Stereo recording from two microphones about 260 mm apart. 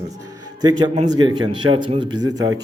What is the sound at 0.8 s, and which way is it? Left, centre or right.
A man's voice, centre.